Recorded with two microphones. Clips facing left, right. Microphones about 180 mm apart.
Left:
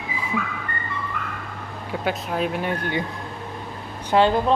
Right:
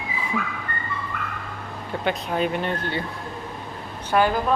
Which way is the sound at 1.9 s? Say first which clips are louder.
Even; 5° left (ahead or behind).